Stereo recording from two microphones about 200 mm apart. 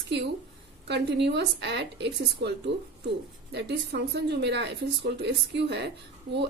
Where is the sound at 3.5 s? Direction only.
60° right (ahead or behind).